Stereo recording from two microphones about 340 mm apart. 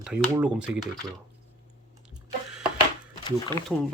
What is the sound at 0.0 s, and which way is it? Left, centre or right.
Speech, centre.